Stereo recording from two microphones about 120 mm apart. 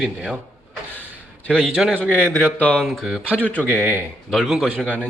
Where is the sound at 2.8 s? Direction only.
Centre (ahead or behind).